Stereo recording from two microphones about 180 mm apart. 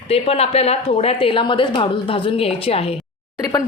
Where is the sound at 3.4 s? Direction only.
20° left (ahead or behind).